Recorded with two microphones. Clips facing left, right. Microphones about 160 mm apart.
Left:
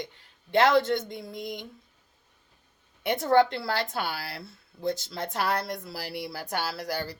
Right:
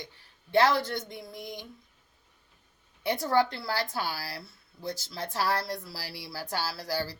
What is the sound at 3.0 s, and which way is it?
Speech, 20° left (ahead or behind).